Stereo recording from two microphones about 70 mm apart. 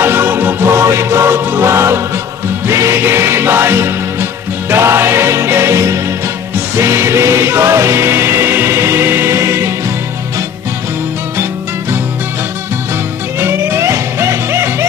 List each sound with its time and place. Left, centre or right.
0.0 s music: right
13.4 s music: right